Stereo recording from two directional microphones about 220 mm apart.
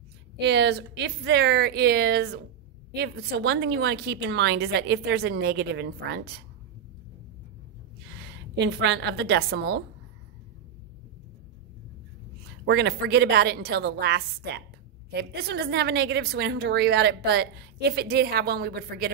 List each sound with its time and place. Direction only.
0.4 s a woman's voice: 50° right (ahead or behind)
8.2 s a woman's voice: 50° right (ahead or behind)
12.6 s a woman's voice: 50° right (ahead or behind)